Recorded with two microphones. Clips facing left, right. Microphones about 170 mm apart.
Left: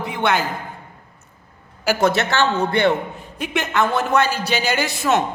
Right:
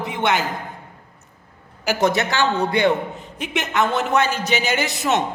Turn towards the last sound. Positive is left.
turn(degrees=-20)  # may be behind; listen again after turning